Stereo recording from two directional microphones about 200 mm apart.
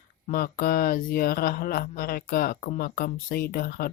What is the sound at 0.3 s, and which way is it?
Speech, 45° left (ahead or behind).